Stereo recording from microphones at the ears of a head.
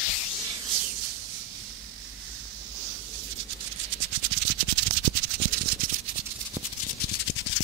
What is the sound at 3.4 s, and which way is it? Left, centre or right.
Music, right.